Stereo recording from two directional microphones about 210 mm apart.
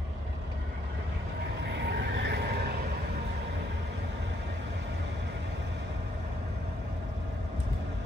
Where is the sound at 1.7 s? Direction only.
55° right (ahead or behind).